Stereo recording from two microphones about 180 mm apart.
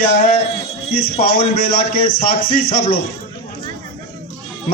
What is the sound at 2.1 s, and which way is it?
Speech, 55° left (ahead or behind).